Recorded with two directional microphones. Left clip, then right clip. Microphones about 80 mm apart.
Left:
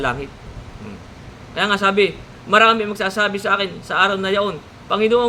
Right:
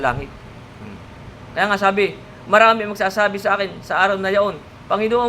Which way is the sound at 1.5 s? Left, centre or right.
Left.